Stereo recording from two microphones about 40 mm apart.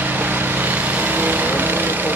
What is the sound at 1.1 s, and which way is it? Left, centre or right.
Vehicle, right.